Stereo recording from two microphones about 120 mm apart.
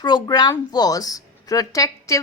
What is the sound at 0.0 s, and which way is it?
A woman's voice, 40° left (ahead or behind).